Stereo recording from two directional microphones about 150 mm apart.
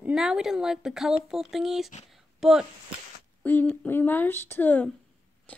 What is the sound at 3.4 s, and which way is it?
Speech, 10° left (ahead or behind).